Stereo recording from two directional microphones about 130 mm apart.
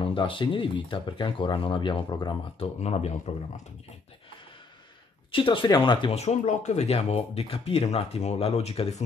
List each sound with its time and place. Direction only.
0.0 s speech: 40° left (ahead or behind)
2.8 s speech: 55° left (ahead or behind)
5.3 s speech: 40° left (ahead or behind)
6.2 s speech: 60° left (ahead or behind)